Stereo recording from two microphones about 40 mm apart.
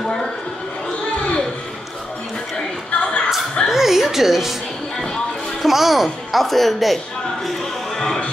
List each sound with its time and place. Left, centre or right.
0.0 s a sound: centre
2.9 s a sound: left
3.6 s music: centre
4.9 s music: centre
5.6 s speech: centre
7.9 s music: centre